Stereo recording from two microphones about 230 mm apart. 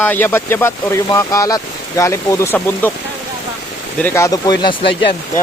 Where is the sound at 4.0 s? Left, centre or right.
Centre.